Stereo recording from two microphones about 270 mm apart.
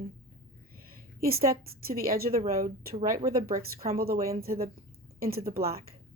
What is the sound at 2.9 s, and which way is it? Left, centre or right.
Speech, right.